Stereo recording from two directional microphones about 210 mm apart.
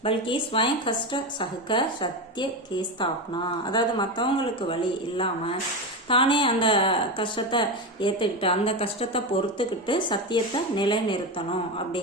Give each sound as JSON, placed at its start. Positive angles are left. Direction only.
{"t": 0.0, "sound": "speech", "side_deg": 25}